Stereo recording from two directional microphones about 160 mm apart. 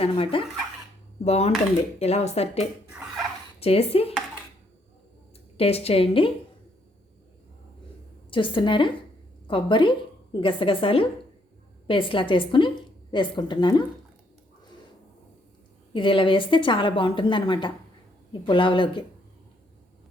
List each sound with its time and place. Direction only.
0.0 s a woman's voice: 35° left (ahead or behind)
5.5 s a woman's voice: 40° left (ahead or behind)
8.3 s a woman's voice: 30° left (ahead or behind)
15.9 s a woman's voice: 30° left (ahead or behind)